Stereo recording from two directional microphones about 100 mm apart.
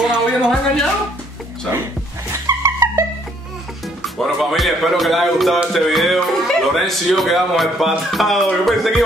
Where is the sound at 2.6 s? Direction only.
35° right (ahead or behind).